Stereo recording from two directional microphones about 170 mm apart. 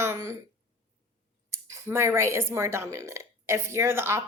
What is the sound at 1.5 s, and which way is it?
Speech, 15° right (ahead or behind).